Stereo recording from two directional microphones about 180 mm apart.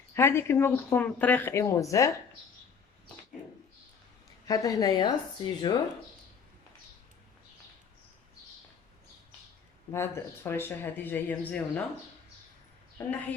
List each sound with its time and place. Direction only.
0.2 s speech: 15° left (ahead or behind)
4.4 s speech: 20° left (ahead or behind)
9.9 s speech: 15° left (ahead or behind)